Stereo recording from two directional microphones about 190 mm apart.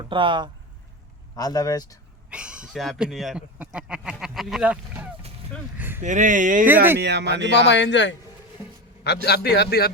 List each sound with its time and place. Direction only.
0.0 s speech: 25° right (ahead or behind)
1.4 s speech: 20° left (ahead or behind)
2.3 s speech: 5° right (ahead or behind)
6.0 s speech: 40° right (ahead or behind)
7.0 s speech: 65° right (ahead or behind)
7.5 s speech: 65° left (ahead or behind)
9.2 s a man's voice: 60° left (ahead or behind)